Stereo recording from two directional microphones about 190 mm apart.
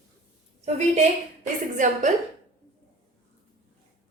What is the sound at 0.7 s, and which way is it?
A woman's voice, 35° right (ahead or behind).